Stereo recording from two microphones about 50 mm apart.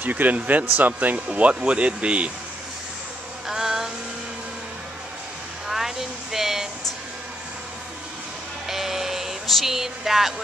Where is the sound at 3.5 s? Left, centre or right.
Centre.